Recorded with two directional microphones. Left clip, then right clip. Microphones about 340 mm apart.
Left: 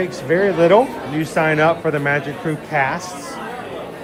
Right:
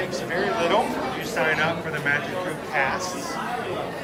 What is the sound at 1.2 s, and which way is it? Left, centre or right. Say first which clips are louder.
Speech: left 8 dB; centre.